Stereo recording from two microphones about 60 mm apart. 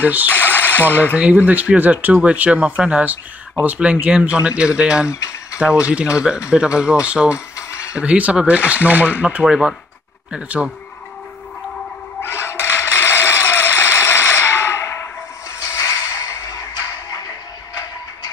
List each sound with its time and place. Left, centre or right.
0.0 s speech: right
0.3 s sewing machine: left
1.1 s speech: right
5.1 s a sound: left
5.6 s speech: centre
7.3 s mechanisms: left
7.9 s speech: centre
12.2 s music: left
13.0 s a sound: left
15.6 s a sound: left
16.2 s music: left